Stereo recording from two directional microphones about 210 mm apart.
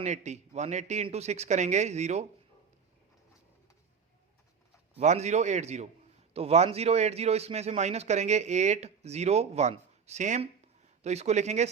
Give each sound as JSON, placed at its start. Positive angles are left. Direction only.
{"t": 0.0, "sound": "a man's voice", "side_deg": -35}
{"t": 4.9, "sound": "a man's voice", "side_deg": -30}